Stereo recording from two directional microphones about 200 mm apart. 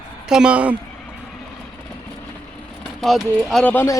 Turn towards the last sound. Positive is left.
turn(degrees=10)  # may be behind; listen again after turning